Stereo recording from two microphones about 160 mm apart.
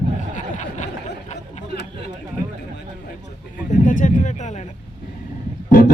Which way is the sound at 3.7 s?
55° left (ahead or behind).